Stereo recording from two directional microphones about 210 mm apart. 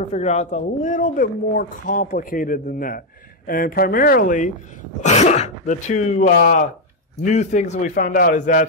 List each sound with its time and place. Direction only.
0.1 s speech: 35° left (ahead or behind)